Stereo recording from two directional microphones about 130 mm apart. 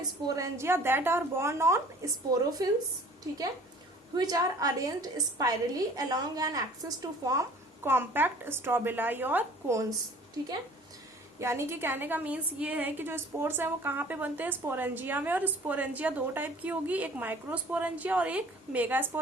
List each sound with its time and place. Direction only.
0.3 s a woman's voice: 25° right (ahead or behind)
4.1 s a woman's voice: 30° right (ahead or behind)
7.9 s a woman's voice: 15° right (ahead or behind)
11.3 s a woman's voice: 20° right (ahead or behind)